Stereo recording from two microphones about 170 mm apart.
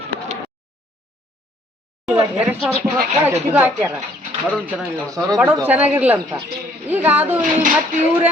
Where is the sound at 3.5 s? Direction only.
10° right (ahead or behind).